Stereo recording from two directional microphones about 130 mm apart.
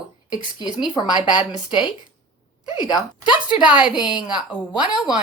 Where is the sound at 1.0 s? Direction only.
35° left (ahead or behind).